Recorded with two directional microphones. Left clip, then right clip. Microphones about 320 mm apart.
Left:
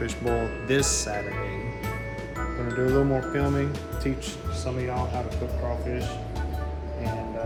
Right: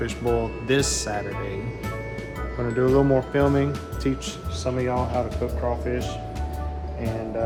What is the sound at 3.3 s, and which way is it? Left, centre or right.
Speech, centre.